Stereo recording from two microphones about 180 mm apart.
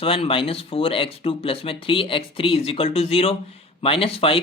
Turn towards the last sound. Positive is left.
turn(degrees=30)  # may be behind; listen again after turning